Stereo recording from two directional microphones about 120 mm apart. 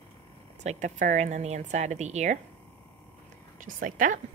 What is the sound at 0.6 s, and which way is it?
A woman's voice, 85° right.